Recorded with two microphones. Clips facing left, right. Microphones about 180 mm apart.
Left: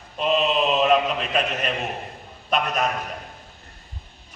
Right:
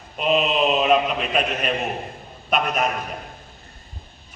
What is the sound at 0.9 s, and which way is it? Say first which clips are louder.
A man's voice: right 1 dB; 5° right (ahead or behind).